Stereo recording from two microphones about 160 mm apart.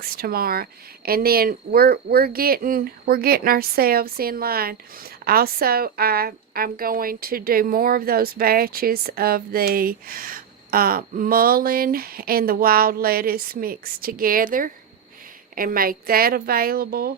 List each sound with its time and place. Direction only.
0.0 s speech: 70° right (ahead or behind)